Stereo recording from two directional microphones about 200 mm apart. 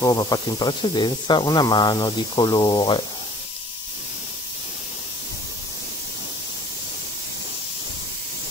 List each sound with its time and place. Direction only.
0.0 s speech: 20° left (ahead or behind)